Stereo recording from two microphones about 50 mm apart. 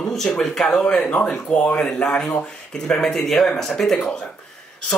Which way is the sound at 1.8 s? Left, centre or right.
Centre.